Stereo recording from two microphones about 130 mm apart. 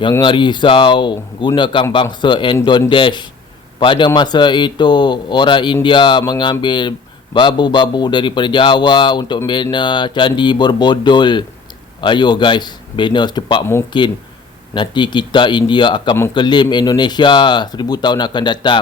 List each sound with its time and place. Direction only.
0.2 s speech: 40° left (ahead or behind)